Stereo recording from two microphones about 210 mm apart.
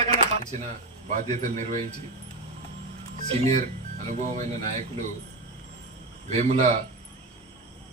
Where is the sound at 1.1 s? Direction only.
35° right (ahead or behind).